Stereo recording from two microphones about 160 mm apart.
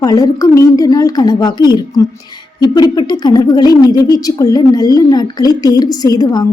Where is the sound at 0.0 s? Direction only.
20° left (ahead or behind).